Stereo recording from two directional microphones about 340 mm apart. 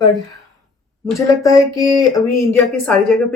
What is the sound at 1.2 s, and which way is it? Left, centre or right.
Speech, centre.